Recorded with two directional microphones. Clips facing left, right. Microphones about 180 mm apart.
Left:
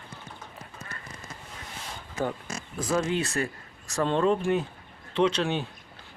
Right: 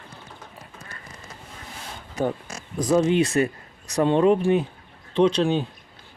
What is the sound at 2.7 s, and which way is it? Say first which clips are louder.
Speech: right 8 dB; 20° right (ahead or behind).